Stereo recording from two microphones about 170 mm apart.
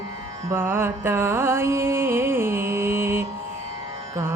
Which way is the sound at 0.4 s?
15° right (ahead or behind).